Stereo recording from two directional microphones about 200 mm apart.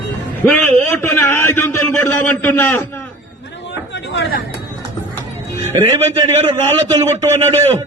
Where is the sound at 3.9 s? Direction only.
60° left (ahead or behind).